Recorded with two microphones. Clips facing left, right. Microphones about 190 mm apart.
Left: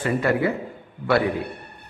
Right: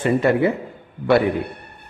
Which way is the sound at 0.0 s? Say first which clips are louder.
Right 4 dB; 25° right (ahead or behind).